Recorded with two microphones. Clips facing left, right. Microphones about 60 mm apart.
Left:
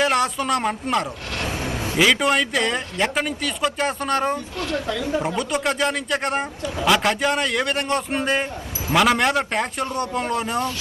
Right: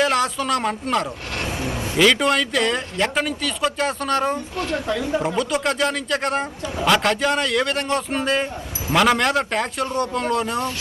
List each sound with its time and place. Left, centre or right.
0.0 s a man's voice: centre
4.5 s speech: right
5.2 s speech: centre
8.9 s speech: centre